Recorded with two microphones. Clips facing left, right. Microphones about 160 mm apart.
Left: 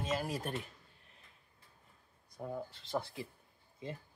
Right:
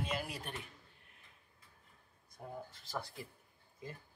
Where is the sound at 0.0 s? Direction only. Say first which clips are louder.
Left 4 dB; 45° left (ahead or behind).